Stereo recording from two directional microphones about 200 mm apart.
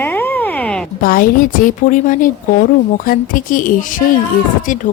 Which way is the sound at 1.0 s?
45° left (ahead or behind).